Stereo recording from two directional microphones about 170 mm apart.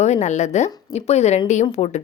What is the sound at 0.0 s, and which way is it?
A woman's voice, 40° left (ahead or behind).